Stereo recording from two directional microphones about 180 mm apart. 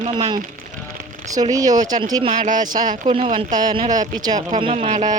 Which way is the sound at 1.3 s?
20° right (ahead or behind).